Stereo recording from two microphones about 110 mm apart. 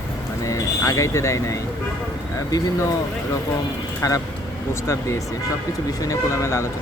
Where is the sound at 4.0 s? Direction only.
30° left (ahead or behind).